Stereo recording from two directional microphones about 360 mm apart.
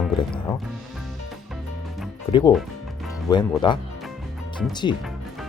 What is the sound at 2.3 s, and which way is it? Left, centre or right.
Speech, centre.